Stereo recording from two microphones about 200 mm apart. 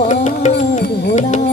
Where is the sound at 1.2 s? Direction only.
35° left (ahead or behind).